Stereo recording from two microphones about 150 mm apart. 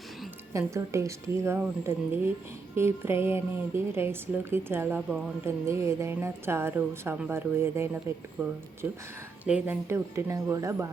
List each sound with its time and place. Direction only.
0.5 s a woman's voice: 20° right (ahead or behind)